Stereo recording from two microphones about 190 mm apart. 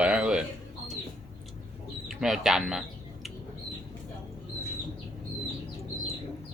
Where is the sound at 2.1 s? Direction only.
Centre (ahead or behind).